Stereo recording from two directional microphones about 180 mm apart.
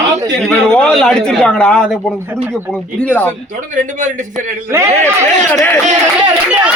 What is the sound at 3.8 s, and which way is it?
Speech, 45° right (ahead or behind).